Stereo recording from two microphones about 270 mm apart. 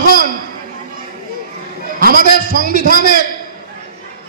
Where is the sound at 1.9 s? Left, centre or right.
Right.